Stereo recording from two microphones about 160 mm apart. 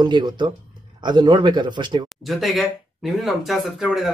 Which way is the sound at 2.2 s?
Centre (ahead or behind).